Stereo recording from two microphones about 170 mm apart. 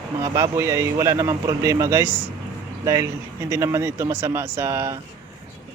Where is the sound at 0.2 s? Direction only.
20° right (ahead or behind).